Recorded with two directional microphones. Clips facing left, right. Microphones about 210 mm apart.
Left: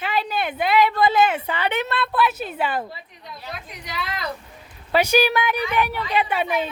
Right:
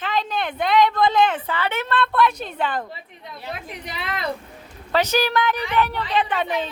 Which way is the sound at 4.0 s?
55° right (ahead or behind).